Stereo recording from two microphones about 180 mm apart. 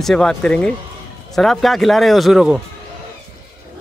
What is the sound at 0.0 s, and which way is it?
Speech, centre (ahead or behind).